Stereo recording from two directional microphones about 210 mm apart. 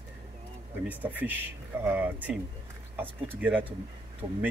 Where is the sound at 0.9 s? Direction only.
10° right (ahead or behind).